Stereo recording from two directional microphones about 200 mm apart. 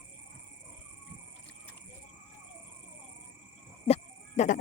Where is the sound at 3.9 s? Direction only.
35° left (ahead or behind).